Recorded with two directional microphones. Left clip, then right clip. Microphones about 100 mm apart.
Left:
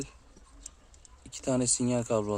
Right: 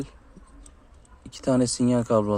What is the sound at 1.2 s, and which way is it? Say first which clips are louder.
Speech: right 7 dB; 25° right (ahead or behind).